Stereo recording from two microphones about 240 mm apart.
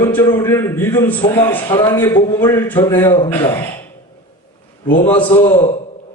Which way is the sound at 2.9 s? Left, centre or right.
Centre.